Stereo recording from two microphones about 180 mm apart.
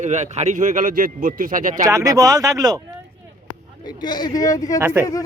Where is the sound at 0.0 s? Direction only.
40° right (ahead or behind).